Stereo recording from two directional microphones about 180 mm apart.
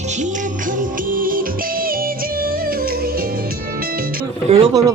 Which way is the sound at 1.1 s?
50° right (ahead or behind).